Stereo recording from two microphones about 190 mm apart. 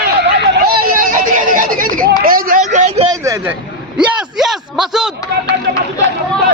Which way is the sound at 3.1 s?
15° right (ahead or behind).